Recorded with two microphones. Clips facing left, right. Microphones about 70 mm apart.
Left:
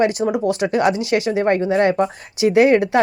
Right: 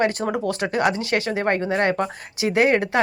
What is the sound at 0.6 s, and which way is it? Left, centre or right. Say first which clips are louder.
Speech: left 4 dB; right.